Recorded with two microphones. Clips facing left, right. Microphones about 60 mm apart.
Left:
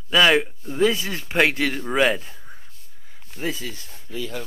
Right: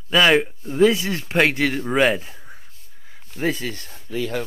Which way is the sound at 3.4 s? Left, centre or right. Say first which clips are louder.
Right 5 dB; right.